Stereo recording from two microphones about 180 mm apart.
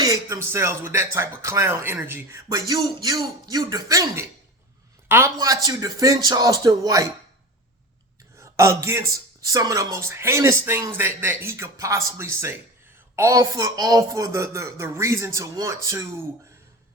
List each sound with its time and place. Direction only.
0.0 s music: 15° right (ahead or behind)
0.4 s a man's voice: 15° right (ahead or behind)
8.4 s a man's voice: 15° right (ahead or behind)